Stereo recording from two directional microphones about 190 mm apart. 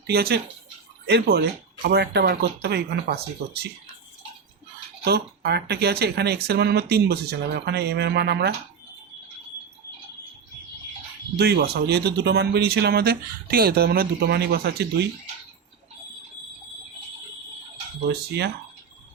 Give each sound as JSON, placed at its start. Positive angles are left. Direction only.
{"t": 0.1, "sound": "speech", "side_deg": -55}
{"t": 5.0, "sound": "speech", "side_deg": -55}
{"t": 11.3, "sound": "speech", "side_deg": -60}
{"t": 18.1, "sound": "speech", "side_deg": -60}